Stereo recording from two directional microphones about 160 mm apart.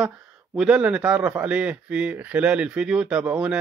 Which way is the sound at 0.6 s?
5° right (ahead or behind).